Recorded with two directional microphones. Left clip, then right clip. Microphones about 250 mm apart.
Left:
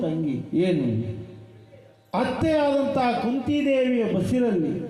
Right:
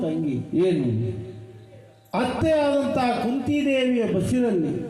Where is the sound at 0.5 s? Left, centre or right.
Left.